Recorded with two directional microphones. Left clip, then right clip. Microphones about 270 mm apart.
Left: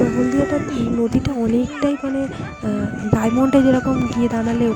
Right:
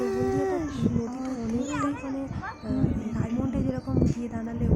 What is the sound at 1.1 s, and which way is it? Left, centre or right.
Speech, left.